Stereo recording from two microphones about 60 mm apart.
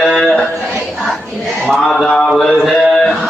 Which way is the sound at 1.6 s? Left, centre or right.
Centre.